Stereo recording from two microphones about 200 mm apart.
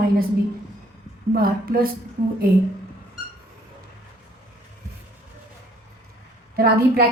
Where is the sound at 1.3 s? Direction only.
45° right (ahead or behind).